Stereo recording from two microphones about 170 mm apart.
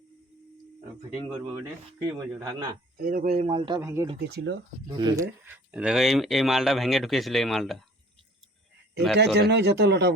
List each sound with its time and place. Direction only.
2.0 s speech: 20° right (ahead or behind)
3.0 s speech: 55° right (ahead or behind)
3.3 s a man's voice: 35° right (ahead or behind)
3.8 s speech: 15° right (ahead or behind)
4.3 s speech: 80° right
4.9 s speech: 20° right (ahead or behind)
5.7 s speech: 5° right (ahead or behind)
9.1 s speech: 90° right